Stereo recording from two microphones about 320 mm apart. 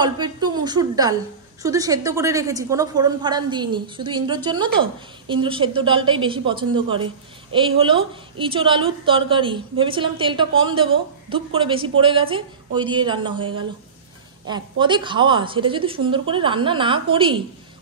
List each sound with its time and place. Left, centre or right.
0.0 s a woman's voice: centre